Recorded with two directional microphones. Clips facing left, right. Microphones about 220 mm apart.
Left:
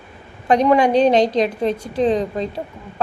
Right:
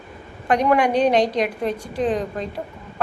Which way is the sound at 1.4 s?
25° left (ahead or behind).